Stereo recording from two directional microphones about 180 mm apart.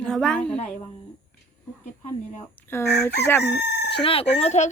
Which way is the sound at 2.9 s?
65° left (ahead or behind).